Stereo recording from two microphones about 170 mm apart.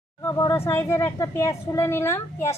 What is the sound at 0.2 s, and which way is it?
Speech, 15° left (ahead or behind).